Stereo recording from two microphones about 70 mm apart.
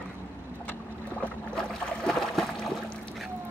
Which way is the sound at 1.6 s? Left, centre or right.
Centre.